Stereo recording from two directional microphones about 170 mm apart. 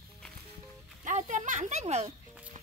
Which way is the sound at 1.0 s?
45° right (ahead or behind).